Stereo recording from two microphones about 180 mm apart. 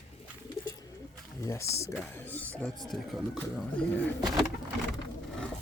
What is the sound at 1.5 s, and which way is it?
Speech, 15° left (ahead or behind).